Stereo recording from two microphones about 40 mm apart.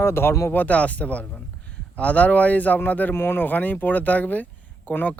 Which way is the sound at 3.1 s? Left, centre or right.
Left.